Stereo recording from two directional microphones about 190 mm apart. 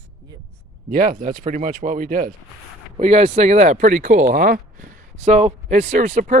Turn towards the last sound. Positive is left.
turn(degrees=-40)  # may be behind; listen again after turning